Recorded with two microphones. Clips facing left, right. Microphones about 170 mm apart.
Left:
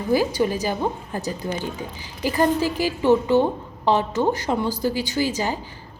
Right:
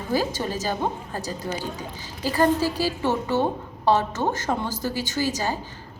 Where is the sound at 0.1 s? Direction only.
15° left (ahead or behind).